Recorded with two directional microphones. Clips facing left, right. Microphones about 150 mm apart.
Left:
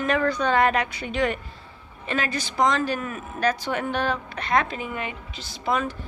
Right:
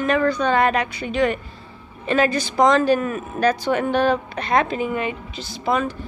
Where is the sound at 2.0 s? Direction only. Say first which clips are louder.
Right 8 dB; 40° right (ahead or behind).